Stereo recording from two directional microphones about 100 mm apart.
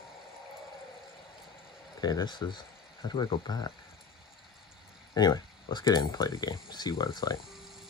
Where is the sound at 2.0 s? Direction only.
40° left (ahead or behind).